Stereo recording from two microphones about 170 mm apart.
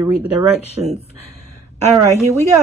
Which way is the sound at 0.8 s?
20° right (ahead or behind).